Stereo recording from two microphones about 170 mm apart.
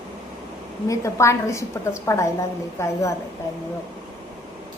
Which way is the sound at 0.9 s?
15° left (ahead or behind).